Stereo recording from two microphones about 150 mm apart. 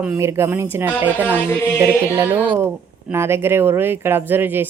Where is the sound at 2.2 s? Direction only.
15° right (ahead or behind).